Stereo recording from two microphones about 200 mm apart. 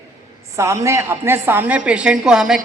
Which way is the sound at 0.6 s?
15° right (ahead or behind).